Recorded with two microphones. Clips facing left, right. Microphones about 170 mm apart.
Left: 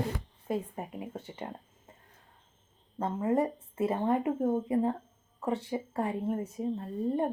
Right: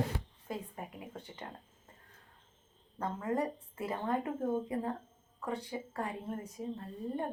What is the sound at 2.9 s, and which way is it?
Speech, 25° left (ahead or behind).